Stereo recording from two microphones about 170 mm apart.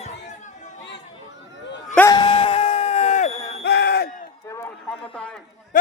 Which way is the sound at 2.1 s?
25° left (ahead or behind).